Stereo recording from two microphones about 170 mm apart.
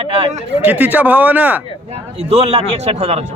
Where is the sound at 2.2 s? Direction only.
35° right (ahead or behind).